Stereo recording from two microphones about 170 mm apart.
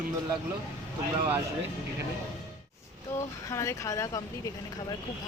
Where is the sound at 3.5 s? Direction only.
15° left (ahead or behind).